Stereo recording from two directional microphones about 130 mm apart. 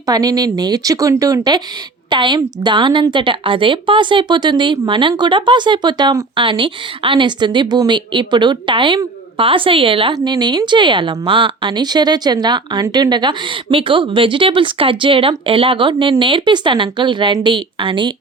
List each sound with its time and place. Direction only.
0.0 s a woman's voice: 30° right (ahead or behind)